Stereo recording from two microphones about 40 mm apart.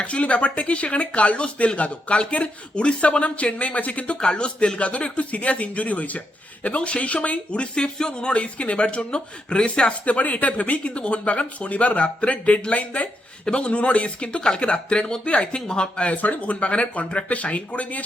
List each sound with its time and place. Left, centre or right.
0.0 s speech: left
13.4 s speech: left
16.1 s speech: left